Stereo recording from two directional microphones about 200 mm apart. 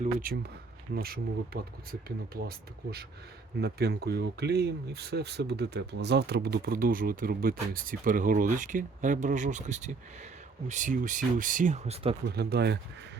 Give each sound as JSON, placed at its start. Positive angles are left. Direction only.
{"t": 0.0, "sound": "speech", "side_deg": -45}
{"t": 12.2, "sound": "speech", "side_deg": -55}